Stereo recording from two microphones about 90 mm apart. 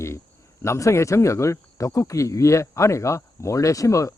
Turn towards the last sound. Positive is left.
turn(degrees=35)  # may be behind; listen again after turning